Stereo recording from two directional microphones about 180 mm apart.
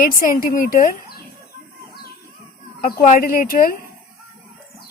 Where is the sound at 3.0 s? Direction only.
50° left (ahead or behind).